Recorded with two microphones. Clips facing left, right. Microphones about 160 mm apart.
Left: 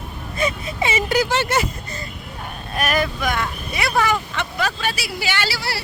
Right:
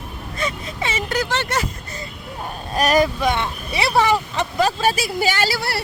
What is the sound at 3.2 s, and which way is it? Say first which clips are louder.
Speech: right 3 dB; 25° right (ahead or behind).